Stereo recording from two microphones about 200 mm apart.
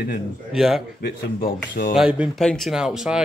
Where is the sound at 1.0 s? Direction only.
45° left (ahead or behind).